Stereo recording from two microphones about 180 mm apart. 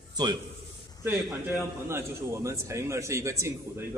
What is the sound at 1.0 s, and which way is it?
A man's voice, 15° right (ahead or behind).